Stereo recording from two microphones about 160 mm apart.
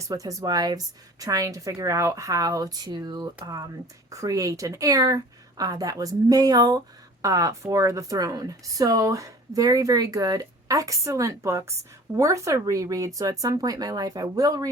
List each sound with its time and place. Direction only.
0.1 s speech: 20° right (ahead or behind)